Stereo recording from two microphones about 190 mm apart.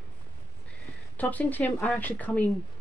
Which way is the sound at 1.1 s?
10° left (ahead or behind).